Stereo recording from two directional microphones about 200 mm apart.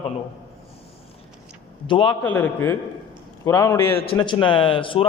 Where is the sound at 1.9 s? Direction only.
25° left (ahead or behind).